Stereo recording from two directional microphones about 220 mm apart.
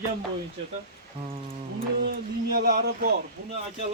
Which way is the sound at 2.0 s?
50° right (ahead or behind).